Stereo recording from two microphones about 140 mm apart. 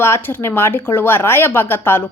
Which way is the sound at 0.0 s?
15° left (ahead or behind).